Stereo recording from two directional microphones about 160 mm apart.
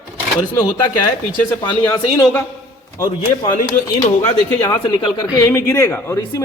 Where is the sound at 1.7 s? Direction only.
15° left (ahead or behind).